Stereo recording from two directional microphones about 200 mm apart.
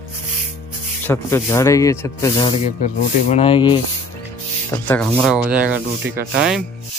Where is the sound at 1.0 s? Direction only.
10° left (ahead or behind).